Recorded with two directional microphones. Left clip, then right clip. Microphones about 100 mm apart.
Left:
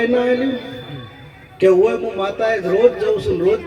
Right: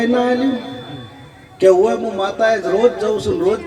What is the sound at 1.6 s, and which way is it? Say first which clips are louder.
Speech: right 1 dB; 30° right (ahead or behind).